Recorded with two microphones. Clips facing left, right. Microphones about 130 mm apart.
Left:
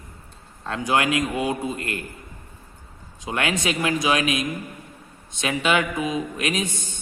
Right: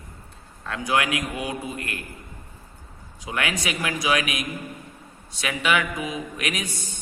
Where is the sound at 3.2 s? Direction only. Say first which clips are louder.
Left 3 dB; 25° left (ahead or behind).